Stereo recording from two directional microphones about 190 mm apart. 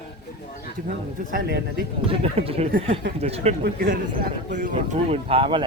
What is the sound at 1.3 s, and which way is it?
Speech, 55° right (ahead or behind).